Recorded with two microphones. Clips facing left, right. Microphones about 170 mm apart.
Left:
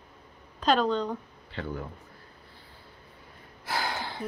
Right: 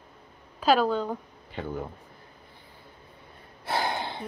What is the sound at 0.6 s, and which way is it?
Speech, 5° right (ahead or behind).